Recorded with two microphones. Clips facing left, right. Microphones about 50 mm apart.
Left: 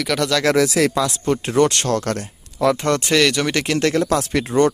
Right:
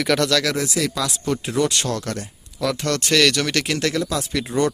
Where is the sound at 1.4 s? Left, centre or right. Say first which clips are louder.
Left 5 dB; left.